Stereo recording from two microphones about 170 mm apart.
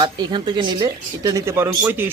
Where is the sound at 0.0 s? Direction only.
30° right (ahead or behind).